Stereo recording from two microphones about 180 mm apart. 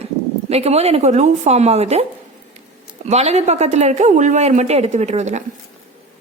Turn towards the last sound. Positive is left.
turn(degrees=-40)  # may be behind; listen again after turning